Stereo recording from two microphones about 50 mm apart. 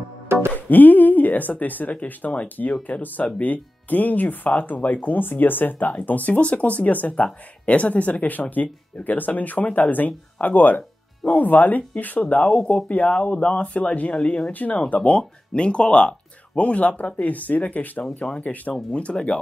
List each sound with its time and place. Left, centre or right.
0.6 s speech: left
15.0 s speech: left